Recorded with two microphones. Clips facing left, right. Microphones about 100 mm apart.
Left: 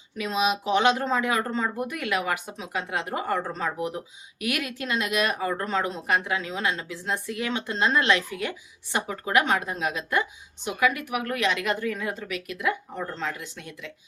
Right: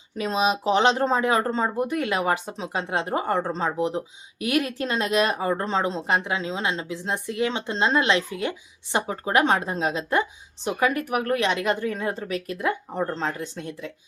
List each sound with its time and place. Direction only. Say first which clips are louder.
0.2 s speech: right 2 dB; 35° right (ahead or behind)